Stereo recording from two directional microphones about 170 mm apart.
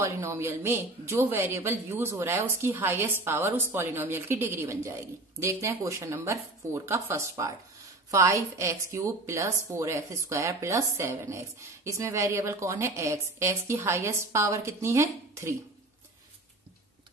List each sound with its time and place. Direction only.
0.0 s speech: 15° right (ahead or behind)